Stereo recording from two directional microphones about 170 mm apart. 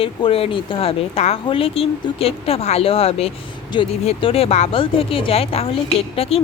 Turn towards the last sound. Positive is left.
turn(degrees=35)  # may be behind; listen again after turning